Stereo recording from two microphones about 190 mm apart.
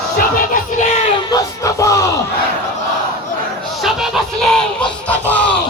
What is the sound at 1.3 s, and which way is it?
Music, 15° left (ahead or behind).